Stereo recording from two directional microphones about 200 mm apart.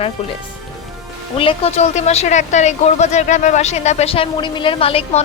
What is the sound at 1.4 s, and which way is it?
Speech, 30° left (ahead or behind).